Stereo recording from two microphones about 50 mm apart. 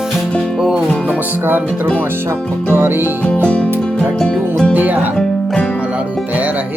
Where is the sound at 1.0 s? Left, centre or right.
Right.